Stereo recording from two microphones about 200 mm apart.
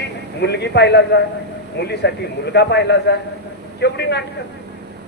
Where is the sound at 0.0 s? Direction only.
55° left (ahead or behind).